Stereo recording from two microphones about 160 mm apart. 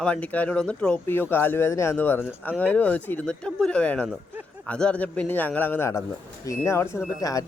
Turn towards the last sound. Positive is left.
turn(degrees=20)  # may be behind; listen again after turning